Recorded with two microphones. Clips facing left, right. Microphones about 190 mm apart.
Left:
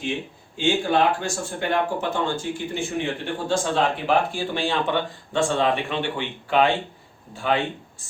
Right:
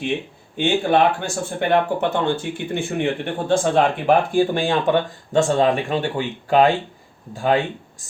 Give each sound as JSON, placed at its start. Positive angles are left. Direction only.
{"t": 0.5, "sound": "speech", "side_deg": -60}